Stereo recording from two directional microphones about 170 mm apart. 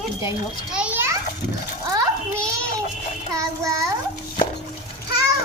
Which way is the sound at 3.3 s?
20° right (ahead or behind).